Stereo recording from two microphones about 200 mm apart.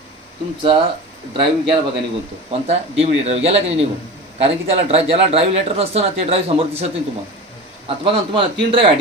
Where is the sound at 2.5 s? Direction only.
30° right (ahead or behind).